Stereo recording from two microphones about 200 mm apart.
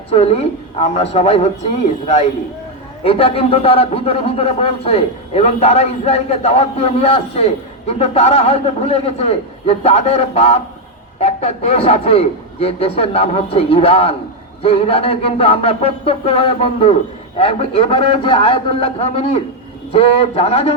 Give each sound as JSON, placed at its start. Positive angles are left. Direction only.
{"t": 0.1, "sound": "speech", "side_deg": 30}
{"t": 3.0, "sound": "a man's voice", "side_deg": 30}